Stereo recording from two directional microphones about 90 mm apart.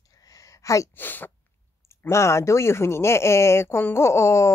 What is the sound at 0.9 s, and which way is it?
Speech, 20° left (ahead or behind).